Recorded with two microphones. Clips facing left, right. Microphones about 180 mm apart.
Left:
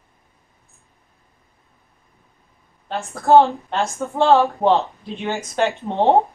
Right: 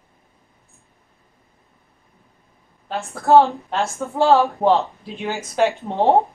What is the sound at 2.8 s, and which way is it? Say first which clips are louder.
A woman's voice: left 1 dB; centre (ahead or behind).